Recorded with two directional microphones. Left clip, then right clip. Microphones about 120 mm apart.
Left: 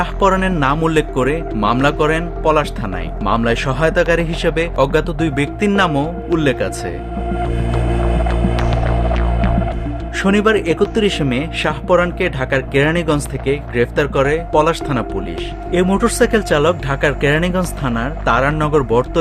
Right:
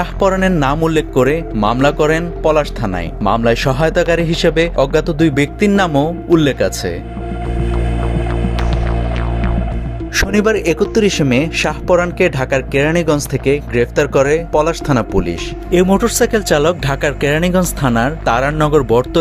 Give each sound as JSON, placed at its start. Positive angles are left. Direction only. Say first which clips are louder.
{"t": 0.0, "sound": "speech", "louder": "right 1 dB", "side_deg": -30}
{"t": 8.3, "sound": "hum", "louder": "left 1 dB", "side_deg": 0}
{"t": 10.2, "sound": "a man's voice", "louder": "even", "side_deg": -45}